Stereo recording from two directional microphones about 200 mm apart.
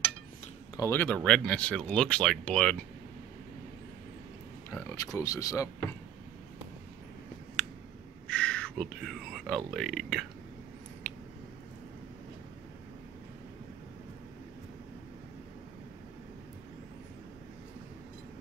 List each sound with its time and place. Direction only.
0.7 s speech: 10° left (ahead or behind)
4.6 s speech: 15° left (ahead or behind)
7.6 s a sound: centre (ahead or behind)
9.7 s speech: centre (ahead or behind)